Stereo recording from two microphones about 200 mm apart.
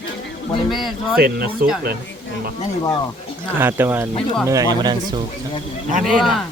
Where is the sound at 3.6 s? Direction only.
10° right (ahead or behind).